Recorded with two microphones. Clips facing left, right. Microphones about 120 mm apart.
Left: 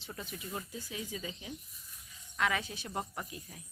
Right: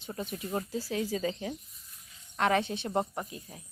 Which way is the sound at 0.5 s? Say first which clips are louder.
Right 10 dB; 35° right (ahead or behind).